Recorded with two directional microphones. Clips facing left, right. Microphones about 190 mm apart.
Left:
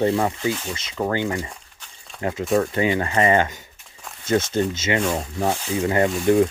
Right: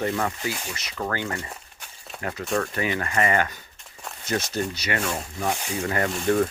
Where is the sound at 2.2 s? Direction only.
25° left (ahead or behind).